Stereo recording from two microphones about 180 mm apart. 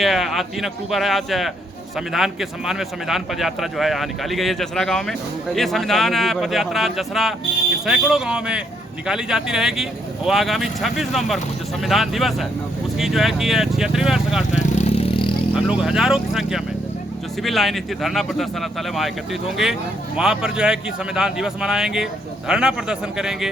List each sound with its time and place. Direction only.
0.0 s a man's voice: centre (ahead or behind)
14.6 s vehicle: 40° left (ahead or behind)
15.5 s a man's voice: 5° right (ahead or behind)